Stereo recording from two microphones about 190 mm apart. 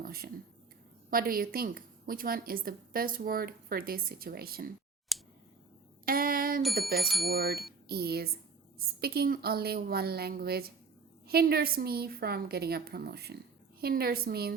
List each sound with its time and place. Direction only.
0.0 s a woman's voice: 50° right (ahead or behind)
5.1 s scissors: centre (ahead or behind)
6.1 s a woman's voice: 50° right (ahead or behind)
7.0 s speech: centre (ahead or behind)
7.3 s a woman's voice: 55° right (ahead or behind)